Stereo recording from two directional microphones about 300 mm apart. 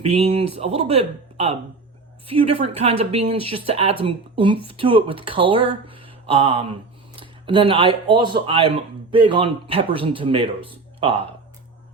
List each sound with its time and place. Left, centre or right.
0.0 s speech: right